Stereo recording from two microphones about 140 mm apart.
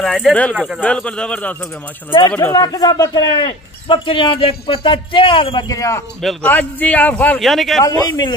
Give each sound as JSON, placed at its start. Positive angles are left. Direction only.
{"t": 0.0, "sound": "a man's voice", "side_deg": 0}
{"t": 2.0, "sound": "speech", "side_deg": 35}
{"t": 6.4, "sound": "a man's voice", "side_deg": 10}
{"t": 7.8, "sound": "a man's voice", "side_deg": 30}